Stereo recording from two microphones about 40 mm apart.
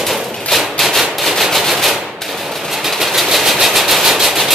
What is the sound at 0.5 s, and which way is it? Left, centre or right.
Rub, centre.